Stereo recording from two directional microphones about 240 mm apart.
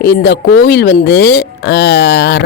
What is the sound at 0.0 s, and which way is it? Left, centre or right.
Speech, left.